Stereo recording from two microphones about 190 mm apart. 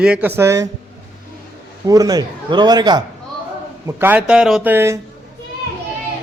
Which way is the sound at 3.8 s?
10° right (ahead or behind).